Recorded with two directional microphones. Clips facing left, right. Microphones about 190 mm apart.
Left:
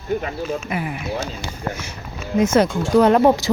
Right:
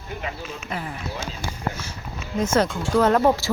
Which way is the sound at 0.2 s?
45° left (ahead or behind).